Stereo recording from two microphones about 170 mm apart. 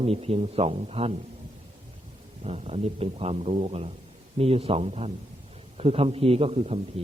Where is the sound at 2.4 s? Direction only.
40° right (ahead or behind).